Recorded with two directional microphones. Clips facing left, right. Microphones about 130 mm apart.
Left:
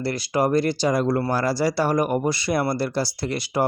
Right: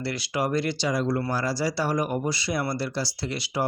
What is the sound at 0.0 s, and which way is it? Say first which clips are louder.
Speech: left 5 dB; 45° left (ahead or behind).